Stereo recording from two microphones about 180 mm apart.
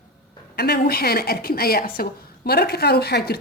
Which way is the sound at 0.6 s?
60° left (ahead or behind).